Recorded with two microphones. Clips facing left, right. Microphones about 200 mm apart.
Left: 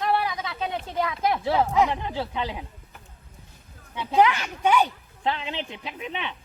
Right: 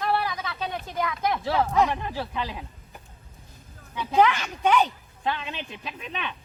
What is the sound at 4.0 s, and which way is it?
Speech, 15° left (ahead or behind).